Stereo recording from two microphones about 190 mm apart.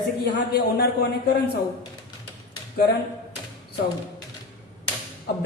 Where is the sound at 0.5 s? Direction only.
60° left (ahead or behind).